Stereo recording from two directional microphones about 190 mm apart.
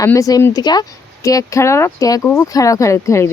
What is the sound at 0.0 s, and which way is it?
Speech, 15° left (ahead or behind).